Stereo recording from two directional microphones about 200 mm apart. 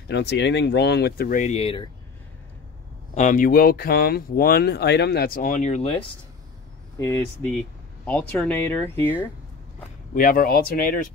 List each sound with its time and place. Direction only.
0.1 s speech: 60° left (ahead or behind); by 1.9 s 30° left (ahead or behind)
3.2 s speech: 40° left (ahead or behind)
7.0 s speech: 10° left (ahead or behind)
10.1 s speech: 45° left (ahead or behind)